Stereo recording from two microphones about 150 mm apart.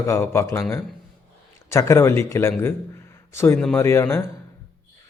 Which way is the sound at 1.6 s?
20° left (ahead or behind).